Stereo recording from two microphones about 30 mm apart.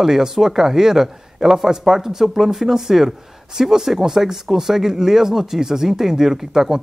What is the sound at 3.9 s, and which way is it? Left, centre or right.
Speech, centre.